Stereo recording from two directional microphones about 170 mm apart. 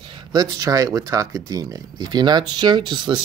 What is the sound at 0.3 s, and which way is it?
Speech, 20° right (ahead or behind).